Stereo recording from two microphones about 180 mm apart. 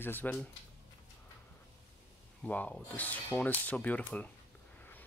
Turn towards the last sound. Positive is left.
turn(degrees=10)  # may be behind; listen again after turning